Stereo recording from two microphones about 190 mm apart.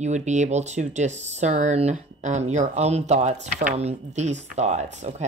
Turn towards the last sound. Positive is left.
turn(degrees=-40)  # may be behind; listen again after turning